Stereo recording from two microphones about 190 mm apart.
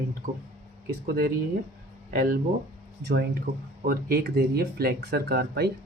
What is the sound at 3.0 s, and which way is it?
Speech, 60° right (ahead or behind).